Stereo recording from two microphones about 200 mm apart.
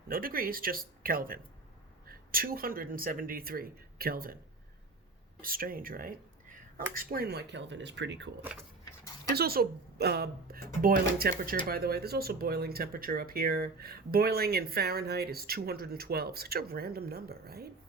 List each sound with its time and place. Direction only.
0.1 s speech: 45° right (ahead or behind)
5.4 s speech: 45° right (ahead or behind); by 8.3 s 65° right (ahead or behind)
9.3 s speech: 50° right (ahead or behind)